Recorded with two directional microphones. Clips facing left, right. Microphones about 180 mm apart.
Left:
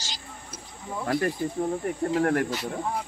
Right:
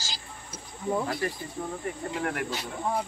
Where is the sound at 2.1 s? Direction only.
40° left (ahead or behind).